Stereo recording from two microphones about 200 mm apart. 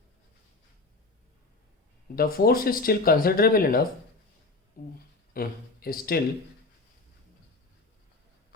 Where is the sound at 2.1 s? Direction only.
45° left (ahead or behind).